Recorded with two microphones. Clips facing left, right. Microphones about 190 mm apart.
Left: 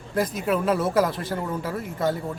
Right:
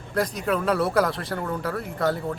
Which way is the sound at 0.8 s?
20° left (ahead or behind).